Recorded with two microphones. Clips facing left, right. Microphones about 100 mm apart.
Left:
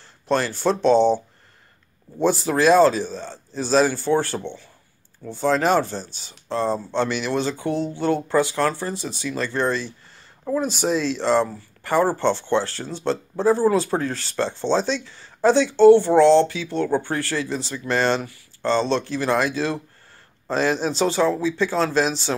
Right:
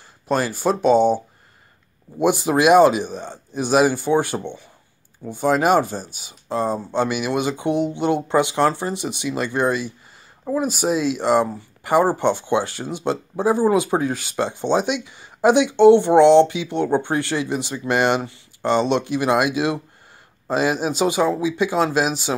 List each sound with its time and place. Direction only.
0.3 s speech: 5° right (ahead or behind)